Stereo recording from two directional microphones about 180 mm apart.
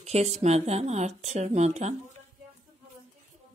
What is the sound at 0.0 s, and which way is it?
Speech, 35° right (ahead or behind).